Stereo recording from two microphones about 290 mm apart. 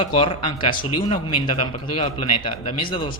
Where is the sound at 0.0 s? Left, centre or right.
Centre.